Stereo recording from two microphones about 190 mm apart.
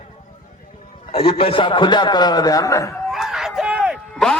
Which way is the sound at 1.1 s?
30° left (ahead or behind).